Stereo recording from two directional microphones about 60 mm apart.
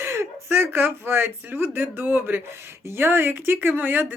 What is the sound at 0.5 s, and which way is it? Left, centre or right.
Speech, right.